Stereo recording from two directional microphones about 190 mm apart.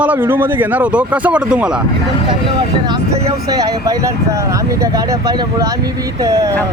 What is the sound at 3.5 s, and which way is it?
Speech, 20° right (ahead or behind).